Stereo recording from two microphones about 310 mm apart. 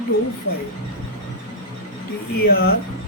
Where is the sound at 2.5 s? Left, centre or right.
Left.